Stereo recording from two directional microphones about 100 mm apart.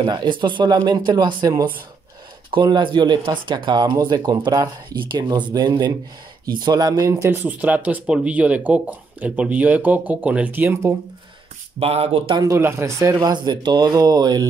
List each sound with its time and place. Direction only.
0.0 s speech: 50° right (ahead or behind)
2.5 s speech: 50° right (ahead or behind)
7.1 s speech: 30° right (ahead or behind)
7.4 s speech: 15° right (ahead or behind)
11.8 s speech: 75° right (ahead or behind)
12.4 s speech: 30° right (ahead or behind)
13.2 s speech: 45° right (ahead or behind)